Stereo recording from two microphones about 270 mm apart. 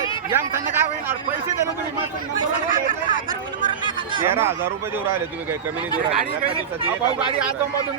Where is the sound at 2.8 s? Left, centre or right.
Right.